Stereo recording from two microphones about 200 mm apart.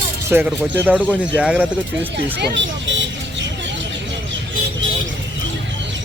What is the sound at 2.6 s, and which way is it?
Vehicle, 65° right (ahead or behind).